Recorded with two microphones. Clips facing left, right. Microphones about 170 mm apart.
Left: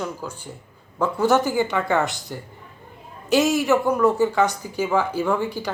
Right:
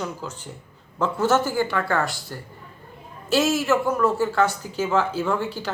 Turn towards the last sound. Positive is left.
turn(degrees=15)  # may be behind; listen again after turning